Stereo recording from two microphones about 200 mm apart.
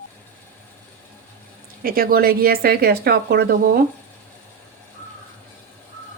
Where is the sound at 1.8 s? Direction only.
45° right (ahead or behind).